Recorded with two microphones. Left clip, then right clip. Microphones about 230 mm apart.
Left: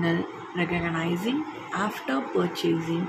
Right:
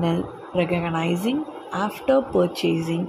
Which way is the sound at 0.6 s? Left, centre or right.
Right.